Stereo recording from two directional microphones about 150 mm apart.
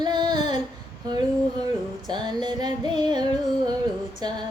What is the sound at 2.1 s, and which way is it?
Female singing, 30° right (ahead or behind).